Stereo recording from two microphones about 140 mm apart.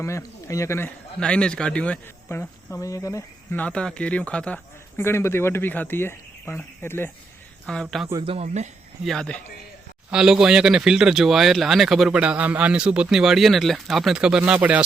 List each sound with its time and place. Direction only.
0.0 s speech: 20° left (ahead or behind)
3.6 s speech: 5° left (ahead or behind)
7.7 s speech: 5° left (ahead or behind)
8.2 s speech: 45° right (ahead or behind)
9.0 s speech: 5° left (ahead or behind)